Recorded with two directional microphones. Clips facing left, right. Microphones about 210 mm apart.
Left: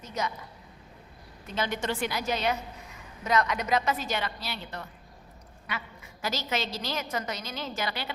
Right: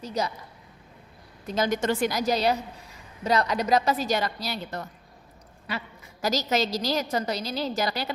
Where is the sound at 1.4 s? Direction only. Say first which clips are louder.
Right 6 dB; 40° right (ahead or behind).